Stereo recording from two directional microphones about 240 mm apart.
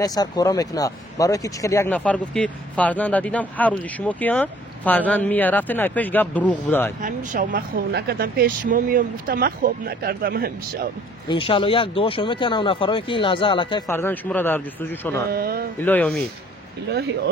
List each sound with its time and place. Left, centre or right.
0.0 s speech: centre
7.0 s speech: right
11.2 s speech: left
15.3 s speech: right
15.8 s speech: centre